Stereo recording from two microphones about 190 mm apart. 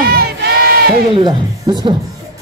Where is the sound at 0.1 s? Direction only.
55° right (ahead or behind).